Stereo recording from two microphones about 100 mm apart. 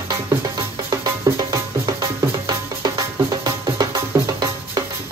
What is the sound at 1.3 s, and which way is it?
Music, 40° right (ahead or behind).